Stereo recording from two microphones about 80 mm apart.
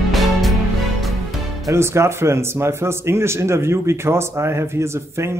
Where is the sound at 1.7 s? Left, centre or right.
Right.